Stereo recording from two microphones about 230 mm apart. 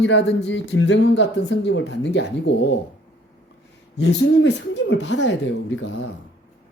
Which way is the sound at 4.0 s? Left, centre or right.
Left.